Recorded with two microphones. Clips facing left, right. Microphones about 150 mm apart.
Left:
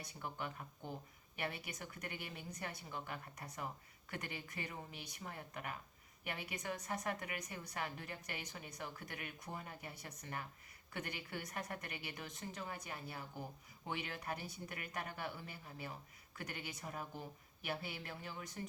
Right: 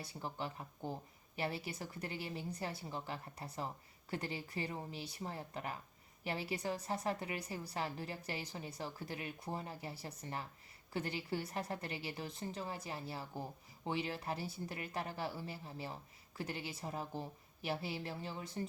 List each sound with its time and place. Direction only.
0.0 s a woman's voice: 30° right (ahead or behind)